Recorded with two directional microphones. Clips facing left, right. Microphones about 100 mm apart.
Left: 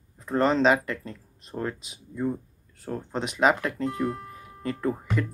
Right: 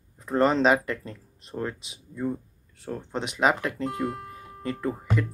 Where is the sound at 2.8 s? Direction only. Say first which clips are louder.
Left 1 dB; 5° left (ahead or behind).